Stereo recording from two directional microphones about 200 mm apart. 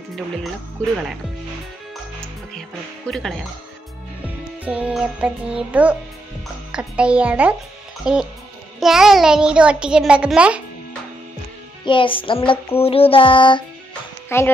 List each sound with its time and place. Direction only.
3.1 s a child's voice: centre (ahead or behind)
4.6 s a child's voice: 5° right (ahead or behind)
11.8 s child singing: 25° left (ahead or behind)
14.3 s a woman's voice: 10° left (ahead or behind)